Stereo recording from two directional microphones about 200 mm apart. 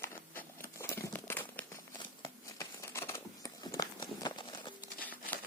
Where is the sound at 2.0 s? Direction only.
15° left (ahead or behind).